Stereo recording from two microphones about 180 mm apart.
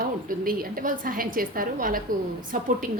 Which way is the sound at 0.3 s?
50° right (ahead or behind).